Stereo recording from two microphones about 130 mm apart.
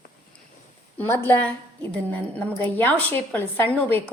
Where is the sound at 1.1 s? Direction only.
15° left (ahead or behind).